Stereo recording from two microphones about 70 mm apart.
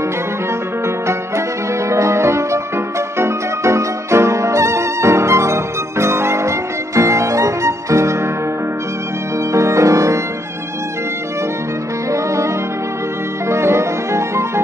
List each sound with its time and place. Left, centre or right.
0.8 s music: right
9.5 s music: right
12.1 s bowed string instrument: right
13.5 s music: right